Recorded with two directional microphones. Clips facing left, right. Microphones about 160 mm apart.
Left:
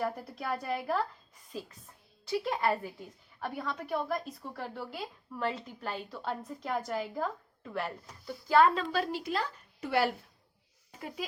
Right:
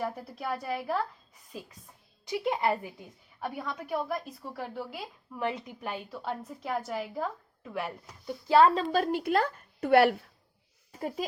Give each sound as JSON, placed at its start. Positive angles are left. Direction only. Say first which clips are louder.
{"t": 0.0, "sound": "speech", "louder": "even", "side_deg": -5}
{"t": 2.2, "sound": "a woman's voice", "louder": "right 2 dB", "side_deg": -15}
{"t": 8.3, "sound": "a woman's voice", "louder": "right 3 dB", "side_deg": -25}